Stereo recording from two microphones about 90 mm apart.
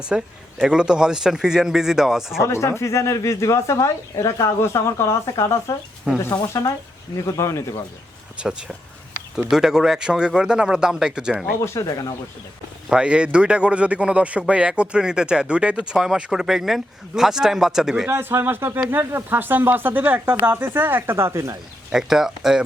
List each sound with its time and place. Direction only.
0.0 s speech: 10° right (ahead or behind)
2.4 s speech: 30° left (ahead or behind)
6.1 s a man's voice: 10° right (ahead or behind)
6.5 s speech: 35° left (ahead or behind)
8.4 s a man's voice: 10° right (ahead or behind)
11.8 s speech: 40° left (ahead or behind)
12.9 s a man's voice: 10° right (ahead or behind)
18.1 s speech: 25° right (ahead or behind)
21.9 s speech: 5° right (ahead or behind)